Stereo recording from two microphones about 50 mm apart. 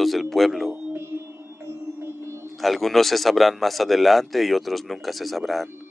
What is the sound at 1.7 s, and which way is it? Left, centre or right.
Music, right.